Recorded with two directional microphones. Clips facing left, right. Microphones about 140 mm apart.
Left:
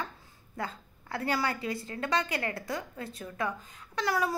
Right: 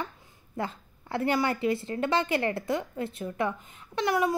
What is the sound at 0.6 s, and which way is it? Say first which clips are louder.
A woman's voice: right 4 dB; 25° right (ahead or behind).